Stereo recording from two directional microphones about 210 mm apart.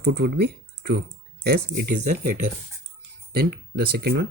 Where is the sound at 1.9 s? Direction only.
35° right (ahead or behind).